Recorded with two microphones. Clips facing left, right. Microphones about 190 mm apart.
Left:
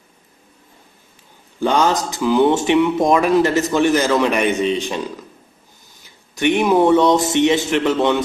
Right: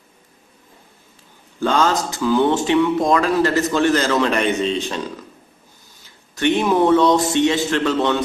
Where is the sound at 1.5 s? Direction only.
15° left (ahead or behind).